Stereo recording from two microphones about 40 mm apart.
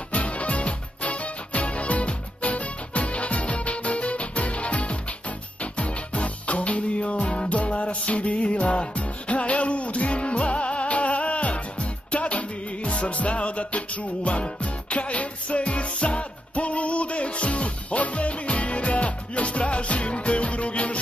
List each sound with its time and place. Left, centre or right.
0.1 s music: left